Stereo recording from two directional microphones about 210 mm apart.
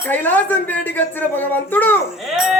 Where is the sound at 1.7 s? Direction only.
10° left (ahead or behind).